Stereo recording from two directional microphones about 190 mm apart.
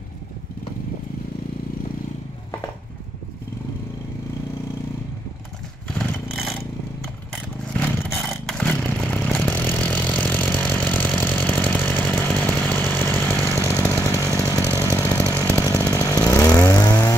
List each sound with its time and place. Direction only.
5.9 s vehicle: centre (ahead or behind)
8.5 s a sound: 5° left (ahead or behind)
12.4 s chainsaw: 5° left (ahead or behind)